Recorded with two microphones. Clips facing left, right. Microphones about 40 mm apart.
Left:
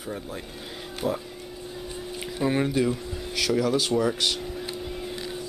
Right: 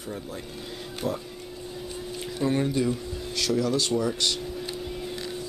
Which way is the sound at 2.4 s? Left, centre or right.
Centre.